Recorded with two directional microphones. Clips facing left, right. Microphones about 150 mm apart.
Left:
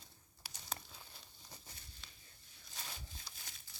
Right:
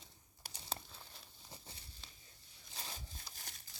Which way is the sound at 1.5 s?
30° right (ahead or behind).